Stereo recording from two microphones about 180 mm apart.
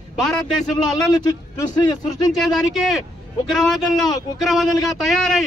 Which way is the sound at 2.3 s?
Centre (ahead or behind).